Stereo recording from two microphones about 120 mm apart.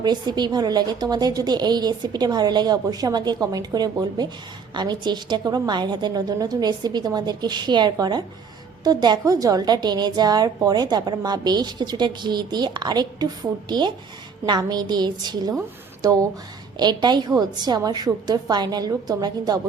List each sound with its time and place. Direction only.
0.0 s a woman's voice: 35° right (ahead or behind)